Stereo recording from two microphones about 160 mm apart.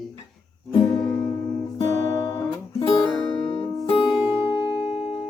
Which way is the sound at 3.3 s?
30° left (ahead or behind).